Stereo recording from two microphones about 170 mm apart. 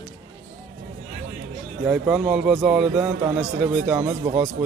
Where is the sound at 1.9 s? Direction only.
10° right (ahead or behind).